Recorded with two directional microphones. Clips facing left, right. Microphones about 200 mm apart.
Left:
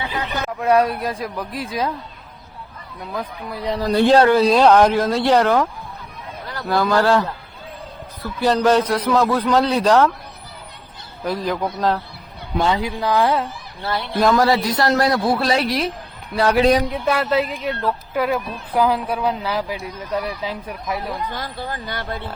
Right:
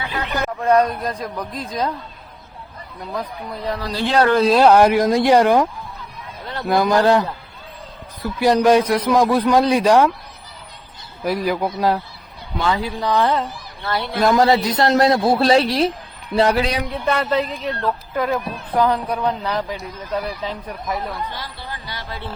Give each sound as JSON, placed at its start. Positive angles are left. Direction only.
{"t": 0.1, "sound": "speech", "side_deg": 5}
{"t": 3.8, "sound": "speech", "side_deg": 45}
{"t": 4.4, "sound": "a man's voice", "side_deg": 0}
{"t": 11.2, "sound": "a man's voice", "side_deg": -10}
{"t": 12.6, "sound": "speech", "side_deg": 20}
{"t": 12.9, "sound": "speech", "side_deg": 5}
{"t": 14.3, "sound": "a man's voice", "side_deg": -20}
{"t": 17.1, "sound": "speech", "side_deg": 5}
{"t": 21.3, "sound": "speech", "side_deg": 50}